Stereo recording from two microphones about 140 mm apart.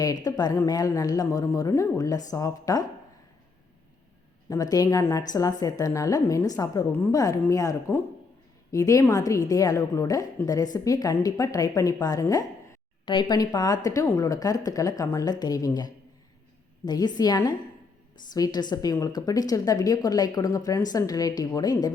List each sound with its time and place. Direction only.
0.0 s a woman's voice: 25° left (ahead or behind)
4.4 s a woman's voice: 25° left (ahead or behind)